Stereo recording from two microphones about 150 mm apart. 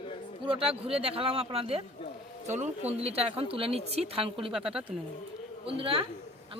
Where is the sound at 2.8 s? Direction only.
40° right (ahead or behind).